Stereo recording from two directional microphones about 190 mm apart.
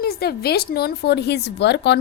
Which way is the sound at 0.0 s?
55° left (ahead or behind).